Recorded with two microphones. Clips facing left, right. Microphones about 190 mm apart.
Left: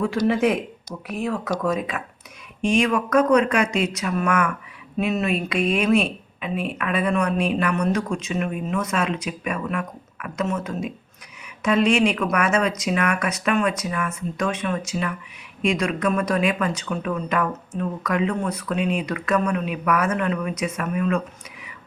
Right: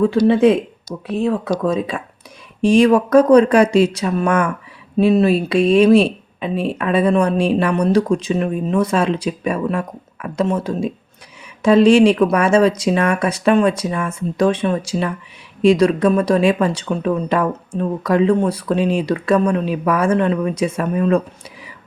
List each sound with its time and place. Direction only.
0.0 s speech: 30° right (ahead or behind)